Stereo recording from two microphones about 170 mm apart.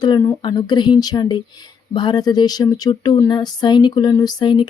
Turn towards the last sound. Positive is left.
turn(degrees=25)  # may be behind; listen again after turning